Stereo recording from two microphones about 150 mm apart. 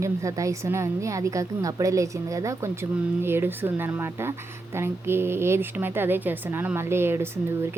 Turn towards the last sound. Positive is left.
turn(degrees=-15)  # may be behind; listen again after turning